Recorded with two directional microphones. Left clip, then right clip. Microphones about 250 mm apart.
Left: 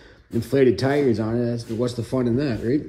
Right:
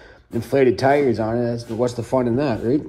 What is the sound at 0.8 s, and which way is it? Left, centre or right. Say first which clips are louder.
Speech: right 4 dB; centre.